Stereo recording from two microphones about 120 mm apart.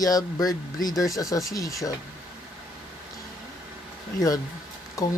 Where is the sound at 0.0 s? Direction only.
30° left (ahead or behind).